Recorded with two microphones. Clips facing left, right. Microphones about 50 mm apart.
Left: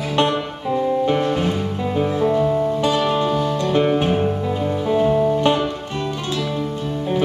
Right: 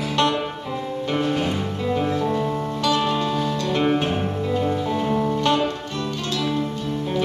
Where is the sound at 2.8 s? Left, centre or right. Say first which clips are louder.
Left 3 dB; left.